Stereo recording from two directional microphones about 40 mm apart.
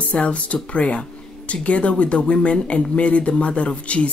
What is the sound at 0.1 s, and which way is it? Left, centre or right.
Speech, left.